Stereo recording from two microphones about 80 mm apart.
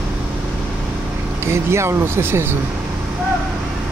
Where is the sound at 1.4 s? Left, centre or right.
Right.